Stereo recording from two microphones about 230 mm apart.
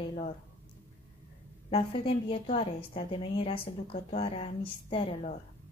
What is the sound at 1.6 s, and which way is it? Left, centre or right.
A woman's voice, left.